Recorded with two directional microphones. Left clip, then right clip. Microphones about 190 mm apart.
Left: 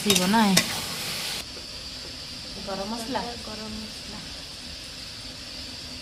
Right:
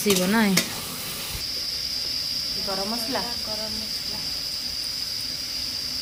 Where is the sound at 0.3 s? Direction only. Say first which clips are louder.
Left 1 dB; centre (ahead or behind).